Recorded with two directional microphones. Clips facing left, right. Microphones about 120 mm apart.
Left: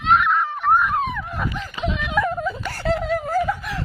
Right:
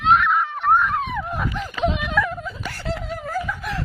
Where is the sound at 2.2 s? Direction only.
40° left (ahead or behind); by 3.1 s 65° left (ahead or behind).